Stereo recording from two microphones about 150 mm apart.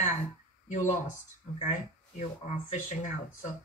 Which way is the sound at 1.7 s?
50° left (ahead or behind).